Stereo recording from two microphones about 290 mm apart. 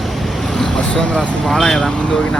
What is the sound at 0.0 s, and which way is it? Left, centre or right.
Speech, centre.